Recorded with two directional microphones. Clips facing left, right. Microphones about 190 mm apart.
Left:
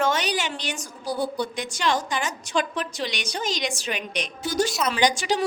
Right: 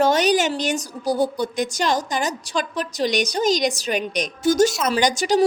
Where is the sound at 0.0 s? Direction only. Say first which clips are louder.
Right 7 dB; 40° right (ahead or behind).